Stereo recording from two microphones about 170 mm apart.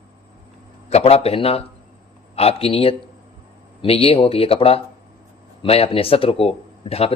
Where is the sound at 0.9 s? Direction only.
35° left (ahead or behind).